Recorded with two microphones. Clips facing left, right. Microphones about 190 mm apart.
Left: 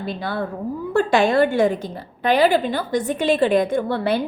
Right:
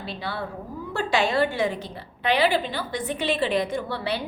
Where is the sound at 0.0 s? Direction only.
50° left (ahead or behind).